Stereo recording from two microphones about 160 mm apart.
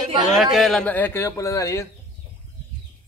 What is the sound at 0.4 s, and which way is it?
Speech, centre (ahead or behind).